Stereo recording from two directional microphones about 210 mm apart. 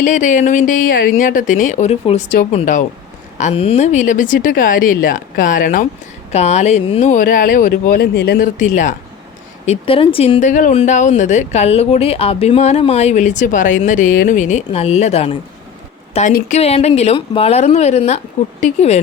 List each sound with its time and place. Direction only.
0.0 s speech: 35° left (ahead or behind); by 8.4 s 50° left (ahead or behind)
8.5 s speech: 35° left (ahead or behind)
9.6 s speech: 25° left (ahead or behind)